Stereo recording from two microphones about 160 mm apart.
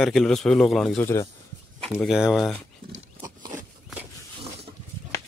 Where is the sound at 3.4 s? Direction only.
55° right (ahead or behind).